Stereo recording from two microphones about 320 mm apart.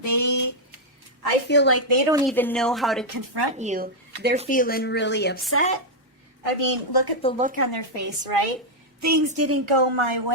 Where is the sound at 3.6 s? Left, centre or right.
Right.